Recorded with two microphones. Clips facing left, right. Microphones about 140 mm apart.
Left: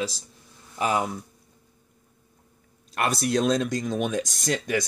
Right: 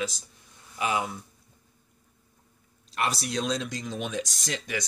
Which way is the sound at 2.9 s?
50° left (ahead or behind).